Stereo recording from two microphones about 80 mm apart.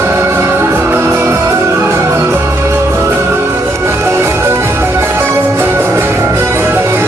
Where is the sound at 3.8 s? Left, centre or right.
Right.